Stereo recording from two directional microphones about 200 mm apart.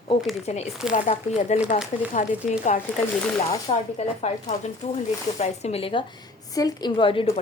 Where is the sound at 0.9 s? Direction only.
30° left (ahead or behind).